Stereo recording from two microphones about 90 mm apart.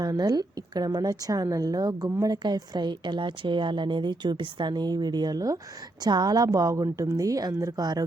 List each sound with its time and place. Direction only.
0.0 s a woman's voice: 45° right (ahead or behind)